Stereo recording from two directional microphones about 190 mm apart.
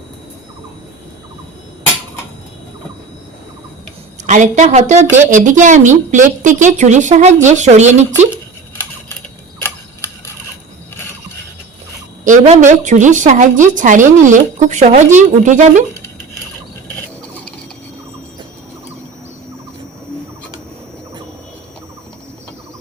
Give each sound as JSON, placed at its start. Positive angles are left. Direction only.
{"t": 4.3, "sound": "a woman's voice", "side_deg": -40}
{"t": 9.6, "sound": "tick-tock", "side_deg": 15}
{"t": 12.2, "sound": "a woman's voice", "side_deg": -40}
{"t": 16.9, "sound": "a sound", "side_deg": 10}